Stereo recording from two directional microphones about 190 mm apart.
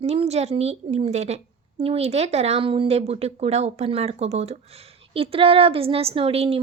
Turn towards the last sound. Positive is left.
turn(degrees=-30)  # may be behind; listen again after turning